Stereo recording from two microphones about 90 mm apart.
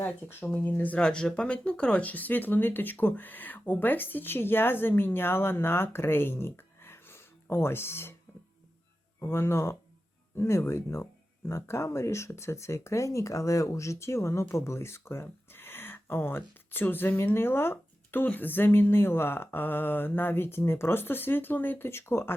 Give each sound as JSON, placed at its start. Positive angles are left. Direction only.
{"t": 0.0, "sound": "speech", "side_deg": 20}
{"t": 9.2, "sound": "speech", "side_deg": 25}